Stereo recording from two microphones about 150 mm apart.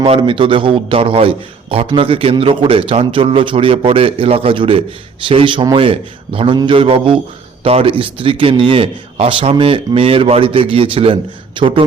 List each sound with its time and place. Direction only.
0.0 s a man's voice: 35° right (ahead or behind)